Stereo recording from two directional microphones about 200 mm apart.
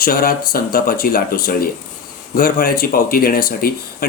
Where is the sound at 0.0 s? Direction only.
45° left (ahead or behind).